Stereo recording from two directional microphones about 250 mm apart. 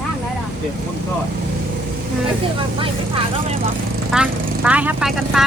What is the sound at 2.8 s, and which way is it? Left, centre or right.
Speech, right.